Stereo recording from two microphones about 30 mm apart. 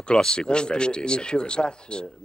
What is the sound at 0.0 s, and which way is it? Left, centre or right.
Speech, left.